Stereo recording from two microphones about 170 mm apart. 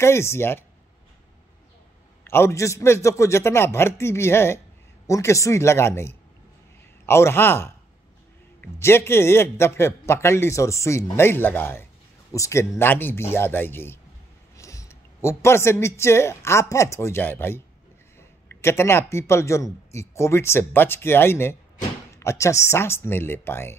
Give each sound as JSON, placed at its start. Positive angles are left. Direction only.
{"t": 0.0, "sound": "a man's voice", "side_deg": 15}
{"t": 2.2, "sound": "a man's voice", "side_deg": 15}